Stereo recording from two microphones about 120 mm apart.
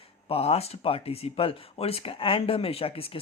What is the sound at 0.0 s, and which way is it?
Speech, 55° left (ahead or behind).